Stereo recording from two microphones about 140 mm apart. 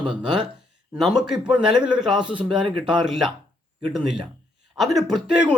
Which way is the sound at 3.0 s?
Centre (ahead or behind).